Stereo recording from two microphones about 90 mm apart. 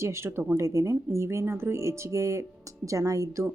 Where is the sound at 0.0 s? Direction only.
30° right (ahead or behind).